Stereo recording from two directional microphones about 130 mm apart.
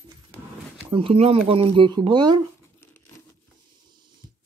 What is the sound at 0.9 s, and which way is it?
Speech, 45° right (ahead or behind).